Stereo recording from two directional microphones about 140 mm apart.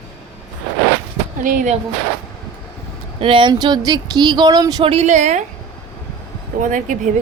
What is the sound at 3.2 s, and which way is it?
Speech, 40° right (ahead or behind).